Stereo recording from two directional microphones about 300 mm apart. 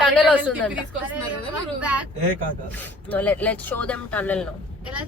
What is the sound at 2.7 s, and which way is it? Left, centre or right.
Speech, centre.